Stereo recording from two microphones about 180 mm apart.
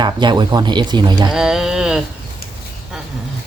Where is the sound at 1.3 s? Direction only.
5° right (ahead or behind).